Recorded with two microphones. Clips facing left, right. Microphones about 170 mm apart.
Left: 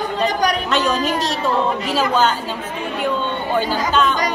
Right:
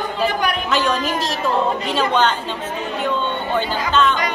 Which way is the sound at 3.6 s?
40° left (ahead or behind).